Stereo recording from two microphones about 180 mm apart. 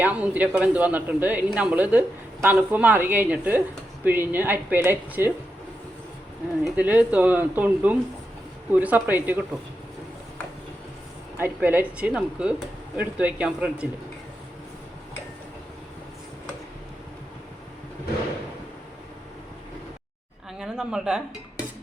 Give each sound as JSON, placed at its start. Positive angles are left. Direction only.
{"t": 0.0, "sound": "a man's voice", "side_deg": -10}
{"t": 6.7, "sound": "a man's voice", "side_deg": -10}
{"t": 11.3, "sound": "a man's voice", "side_deg": -10}
{"t": 20.6, "sound": "speech", "side_deg": -5}